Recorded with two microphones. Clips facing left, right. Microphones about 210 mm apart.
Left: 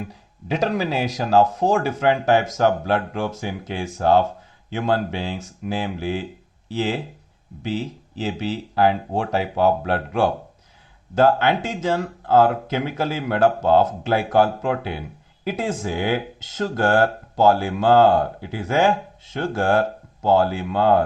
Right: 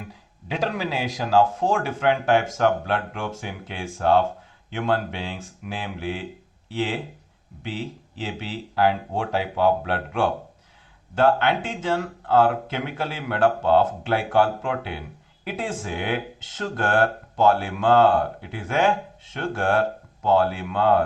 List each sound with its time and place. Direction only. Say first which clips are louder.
0.4 s speech: left 4 dB; 40° left (ahead or behind)
8.2 s speech: left 6 dB; 40° left (ahead or behind)